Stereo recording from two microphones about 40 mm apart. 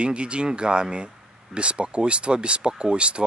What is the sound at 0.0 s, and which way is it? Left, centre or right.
Speech, right.